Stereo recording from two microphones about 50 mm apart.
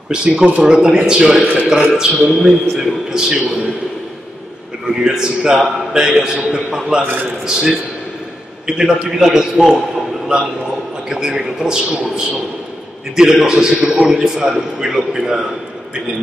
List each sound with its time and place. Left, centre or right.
0.1 s a man's voice: centre
5.0 s a man's voice: centre
11.1 s a man's voice: centre